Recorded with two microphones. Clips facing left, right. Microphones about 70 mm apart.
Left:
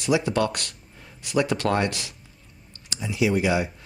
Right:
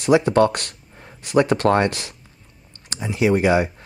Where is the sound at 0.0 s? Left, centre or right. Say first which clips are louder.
Right 7 dB; right.